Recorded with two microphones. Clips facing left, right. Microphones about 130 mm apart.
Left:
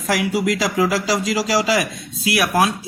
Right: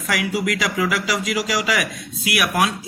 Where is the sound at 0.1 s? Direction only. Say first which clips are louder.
Left 3 dB; 30° left (ahead or behind).